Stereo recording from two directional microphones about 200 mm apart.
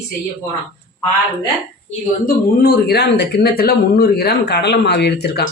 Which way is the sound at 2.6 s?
50° left (ahead or behind).